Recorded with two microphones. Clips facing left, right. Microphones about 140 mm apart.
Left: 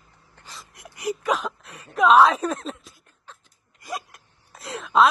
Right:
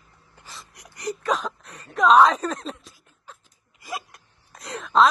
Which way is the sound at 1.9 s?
Centre (ahead or behind).